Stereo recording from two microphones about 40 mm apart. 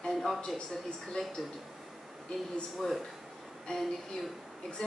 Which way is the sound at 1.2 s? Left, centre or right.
Centre.